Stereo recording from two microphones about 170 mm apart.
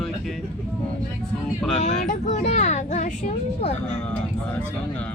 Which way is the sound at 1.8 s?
45° left (ahead or behind).